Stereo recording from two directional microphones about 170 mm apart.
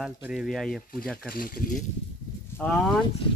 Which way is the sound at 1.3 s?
55° left (ahead or behind).